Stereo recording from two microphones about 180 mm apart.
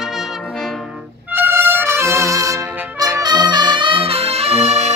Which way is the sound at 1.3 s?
10° right (ahead or behind).